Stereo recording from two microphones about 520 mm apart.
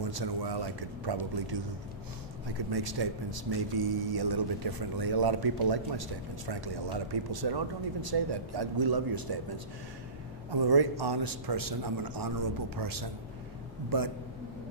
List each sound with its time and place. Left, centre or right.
0.1 s a man's voice: right
2.7 s a man's voice: right
10.7 s a man's voice: right